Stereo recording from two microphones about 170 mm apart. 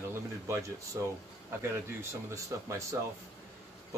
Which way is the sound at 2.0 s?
15° right (ahead or behind).